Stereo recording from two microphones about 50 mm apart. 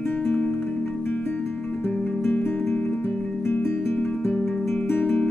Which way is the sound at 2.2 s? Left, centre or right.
Left.